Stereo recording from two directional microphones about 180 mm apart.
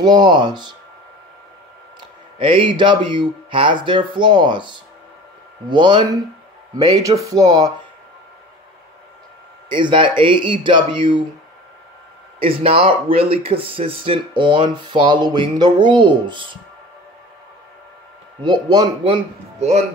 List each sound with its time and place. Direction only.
0.0 s speech: 25° right (ahead or behind)
2.0 s speech: 30° right (ahead or behind)
9.7 s speech: 25° right (ahead or behind)
12.4 s speech: 30° right (ahead or behind)
18.4 s speech: 25° right (ahead or behind)